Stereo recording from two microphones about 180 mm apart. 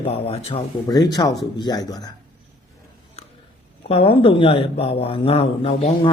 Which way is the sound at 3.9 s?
35° left (ahead or behind).